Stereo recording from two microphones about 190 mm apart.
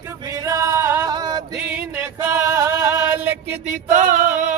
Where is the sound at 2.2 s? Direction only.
15° right (ahead or behind).